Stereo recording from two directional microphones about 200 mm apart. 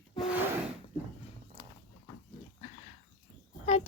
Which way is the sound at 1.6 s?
20° left (ahead or behind).